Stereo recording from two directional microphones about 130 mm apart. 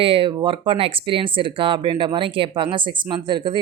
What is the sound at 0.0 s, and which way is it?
Speech, 45° right (ahead or behind).